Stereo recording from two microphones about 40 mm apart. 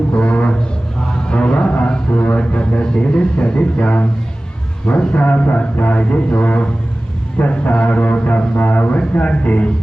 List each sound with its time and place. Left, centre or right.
0.1 s a sound: left
1.9 s speech: left
5.1 s music: left